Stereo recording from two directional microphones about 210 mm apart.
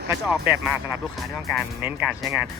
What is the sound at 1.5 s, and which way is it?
Speech, 10° right (ahead or behind).